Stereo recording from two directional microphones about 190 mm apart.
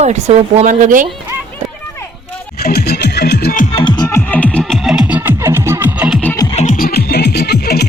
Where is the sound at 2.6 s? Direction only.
55° left (ahead or behind).